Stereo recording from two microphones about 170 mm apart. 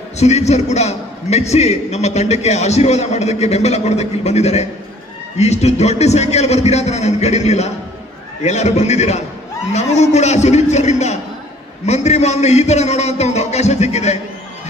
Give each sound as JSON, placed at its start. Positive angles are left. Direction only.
{"t": 0.2, "sound": "a man's voice", "side_deg": 40}